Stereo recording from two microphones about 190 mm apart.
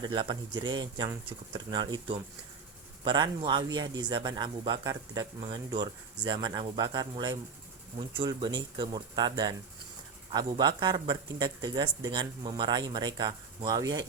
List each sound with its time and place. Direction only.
0.0 s speech: 25° right (ahead or behind)